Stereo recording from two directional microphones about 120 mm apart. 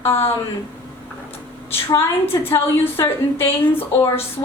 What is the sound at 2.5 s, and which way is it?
Speech, 20° left (ahead or behind).